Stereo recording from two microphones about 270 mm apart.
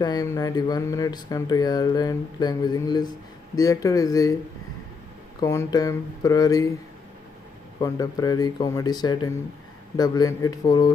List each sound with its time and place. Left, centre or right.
0.0 s speech: centre
5.4 s speech: centre
7.8 s speech: centre